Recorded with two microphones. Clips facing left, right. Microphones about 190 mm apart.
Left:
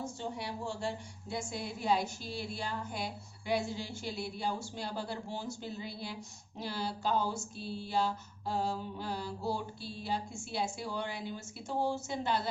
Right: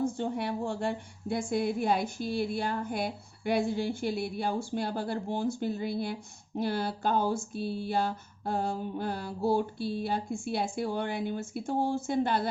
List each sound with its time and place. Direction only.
0.0 s a woman's voice: 55° right (ahead or behind)